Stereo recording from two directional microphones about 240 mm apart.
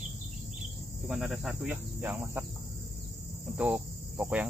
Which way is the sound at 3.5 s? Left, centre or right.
Centre.